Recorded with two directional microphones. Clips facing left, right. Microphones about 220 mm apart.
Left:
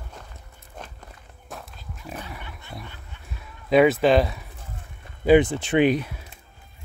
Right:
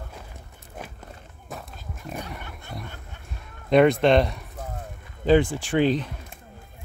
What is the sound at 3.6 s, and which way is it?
Speech, 5° left (ahead or behind).